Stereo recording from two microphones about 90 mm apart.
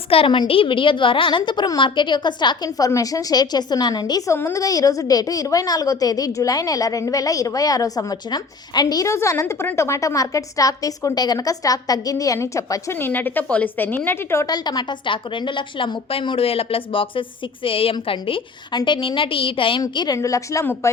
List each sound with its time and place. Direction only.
0.1 s a woman's voice: 75° left (ahead or behind); by 2.6 s 55° left (ahead or behind)
2.6 s a woman's voice: 40° left (ahead or behind)
4.3 s a woman's voice: 30° left (ahead or behind)
4.6 s a woman's voice: 40° left (ahead or behind)
9.0 s a woman's voice: 30° left (ahead or behind)
12.9 s a woman's voice: 25° left (ahead or behind)
14.4 s a woman's voice: 50° left (ahead or behind); by 19.8 s 75° left (ahead or behind)
19.9 s a woman's voice: 55° left (ahead or behind)
20.1 s a woman's voice: 35° left (ahead or behind)